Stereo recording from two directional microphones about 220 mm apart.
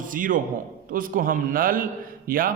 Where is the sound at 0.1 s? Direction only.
40° right (ahead or behind).